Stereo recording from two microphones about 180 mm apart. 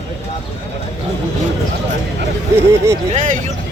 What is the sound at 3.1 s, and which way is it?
Speech, 45° right (ahead or behind).